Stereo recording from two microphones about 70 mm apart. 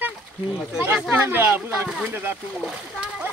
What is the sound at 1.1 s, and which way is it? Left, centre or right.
Speech, right.